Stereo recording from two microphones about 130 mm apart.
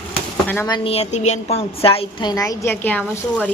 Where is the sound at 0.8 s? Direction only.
55° left (ahead or behind).